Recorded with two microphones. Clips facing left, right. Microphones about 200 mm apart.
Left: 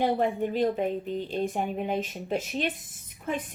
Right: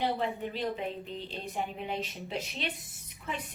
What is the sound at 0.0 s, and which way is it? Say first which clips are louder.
Speech: left 6 dB; 50° left (ahead or behind).